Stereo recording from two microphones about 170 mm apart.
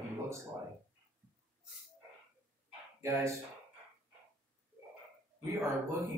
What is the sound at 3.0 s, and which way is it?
Speech, 15° right (ahead or behind).